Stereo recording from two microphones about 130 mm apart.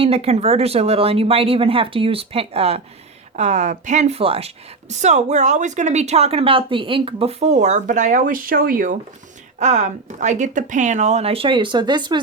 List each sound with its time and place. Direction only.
0.0 s speech: 50° right (ahead or behind)
3.3 s a woman's voice: 65° right (ahead or behind); by 9.0 s 90° right
9.6 s a woman's voice: 65° right (ahead or behind); by 12.2 s 35° right (ahead or behind)